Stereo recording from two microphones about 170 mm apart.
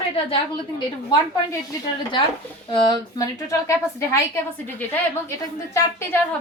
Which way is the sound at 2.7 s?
25° left (ahead or behind).